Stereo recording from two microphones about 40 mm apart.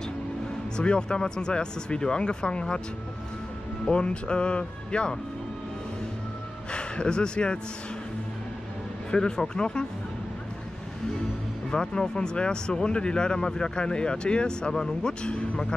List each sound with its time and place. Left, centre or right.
0.7 s speech: left
3.8 s speech: left
6.7 s speech: left
9.1 s speech: centre
11.7 s speech: centre